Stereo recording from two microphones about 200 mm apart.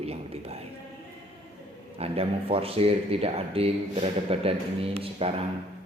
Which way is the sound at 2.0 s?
30° right (ahead or behind).